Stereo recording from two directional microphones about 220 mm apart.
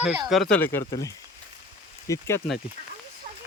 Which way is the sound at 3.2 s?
35° right (ahead or behind).